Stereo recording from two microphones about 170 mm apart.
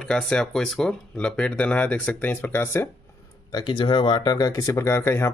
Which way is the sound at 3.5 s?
25° left (ahead or behind).